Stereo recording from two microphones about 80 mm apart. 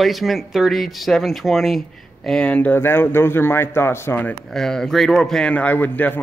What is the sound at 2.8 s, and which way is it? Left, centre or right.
Speech, left.